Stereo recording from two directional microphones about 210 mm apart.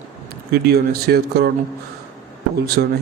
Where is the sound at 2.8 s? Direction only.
50° right (ahead or behind).